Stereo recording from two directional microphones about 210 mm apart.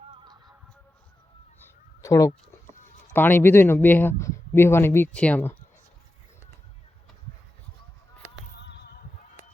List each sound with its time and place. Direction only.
0.1 s music: 20° right (ahead or behind)
2.0 s speech: 15° left (ahead or behind)
8.6 s a sound: 55° left (ahead or behind)